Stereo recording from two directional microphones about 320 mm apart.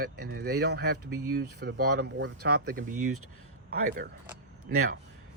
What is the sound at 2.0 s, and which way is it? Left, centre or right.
Speech, right.